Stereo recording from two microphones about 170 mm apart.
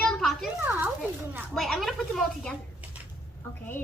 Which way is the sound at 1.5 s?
Centre (ahead or behind).